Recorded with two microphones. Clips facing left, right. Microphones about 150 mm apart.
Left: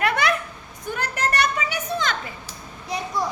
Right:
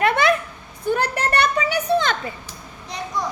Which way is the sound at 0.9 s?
30° right (ahead or behind).